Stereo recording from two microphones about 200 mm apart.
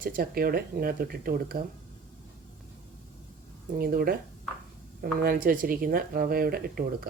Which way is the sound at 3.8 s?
50° right (ahead or behind).